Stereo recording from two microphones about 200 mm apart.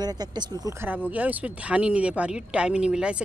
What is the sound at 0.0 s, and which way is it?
Speech, 20° right (ahead or behind).